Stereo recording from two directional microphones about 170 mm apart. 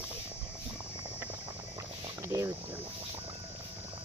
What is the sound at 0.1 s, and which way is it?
Clip-clop, 10° right (ahead or behind).